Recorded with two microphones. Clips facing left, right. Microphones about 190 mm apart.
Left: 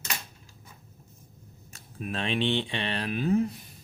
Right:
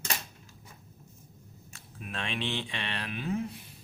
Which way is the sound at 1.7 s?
40° left (ahead or behind).